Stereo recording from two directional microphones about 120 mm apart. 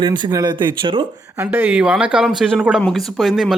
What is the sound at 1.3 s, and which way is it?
Speech, 15° right (ahead or behind).